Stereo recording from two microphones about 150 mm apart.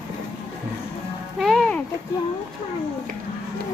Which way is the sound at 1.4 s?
Centre (ahead or behind).